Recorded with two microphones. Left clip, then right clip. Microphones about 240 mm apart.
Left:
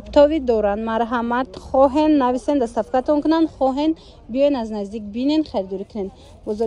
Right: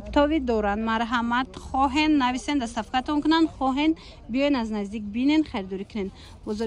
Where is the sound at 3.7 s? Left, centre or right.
Centre.